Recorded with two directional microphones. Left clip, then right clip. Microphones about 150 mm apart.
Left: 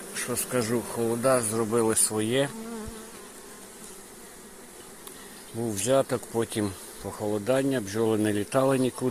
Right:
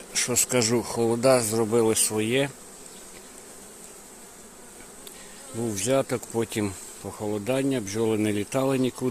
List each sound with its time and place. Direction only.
0.1 s speech: 60° right (ahead or behind); by 2.5 s 35° right (ahead or behind)
5.6 s speech: 35° right (ahead or behind)